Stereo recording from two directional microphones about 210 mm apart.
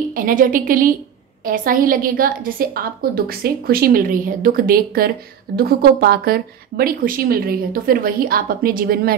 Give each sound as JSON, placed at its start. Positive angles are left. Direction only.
{"t": 0.1, "sound": "a woman's voice", "side_deg": -40}